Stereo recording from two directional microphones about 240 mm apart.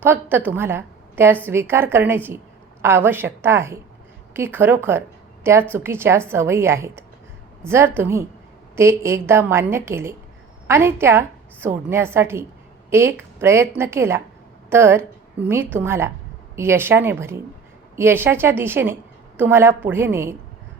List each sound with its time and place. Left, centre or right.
0.0 s a woman's voice: centre